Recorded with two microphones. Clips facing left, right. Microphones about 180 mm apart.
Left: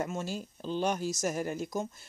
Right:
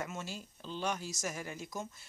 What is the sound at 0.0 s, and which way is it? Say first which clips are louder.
Speech: left 7 dB; 40° left (ahead or behind).